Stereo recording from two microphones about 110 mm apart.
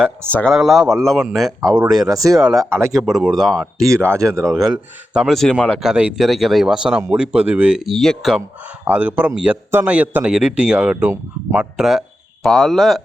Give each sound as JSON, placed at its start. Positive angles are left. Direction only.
{"t": 0.3, "sound": "speech", "side_deg": 15}
{"t": 0.5, "sound": "speech", "side_deg": -5}
{"t": 2.0, "sound": "speech", "side_deg": -30}
{"t": 2.4, "sound": "speech", "side_deg": -5}
{"t": 5.8, "sound": "a man's voice", "side_deg": -10}
{"t": 8.4, "sound": "a man's voice", "side_deg": -15}